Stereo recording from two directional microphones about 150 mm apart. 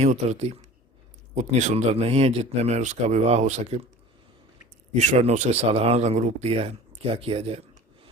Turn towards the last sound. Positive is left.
turn(degrees=-40)  # may be behind; listen again after turning